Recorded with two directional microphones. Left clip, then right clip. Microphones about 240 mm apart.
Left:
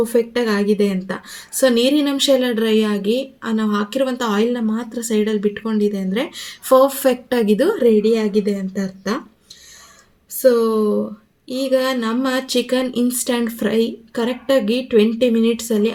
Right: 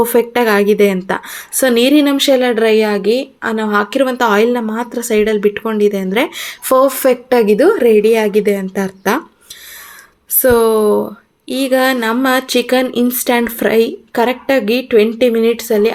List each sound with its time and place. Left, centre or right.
0.0 s speech: centre
3.0 s a woman's voice: right
3.4 s speech: centre
10.4 s speech: centre